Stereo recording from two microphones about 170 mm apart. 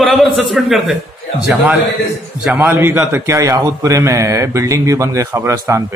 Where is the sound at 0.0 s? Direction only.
Centre (ahead or behind).